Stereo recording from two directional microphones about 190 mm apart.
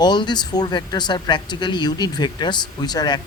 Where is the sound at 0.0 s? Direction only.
20° left (ahead or behind).